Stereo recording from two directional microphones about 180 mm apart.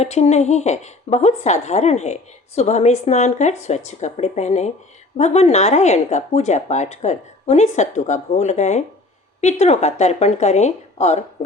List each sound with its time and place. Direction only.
0.0 s speech: 35° left (ahead or behind)